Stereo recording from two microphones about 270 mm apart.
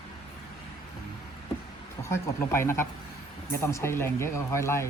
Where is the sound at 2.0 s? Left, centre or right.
Centre.